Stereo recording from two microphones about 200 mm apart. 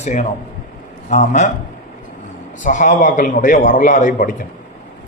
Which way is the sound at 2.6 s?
40° left (ahead or behind).